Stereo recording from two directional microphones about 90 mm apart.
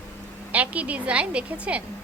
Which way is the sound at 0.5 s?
15° right (ahead or behind).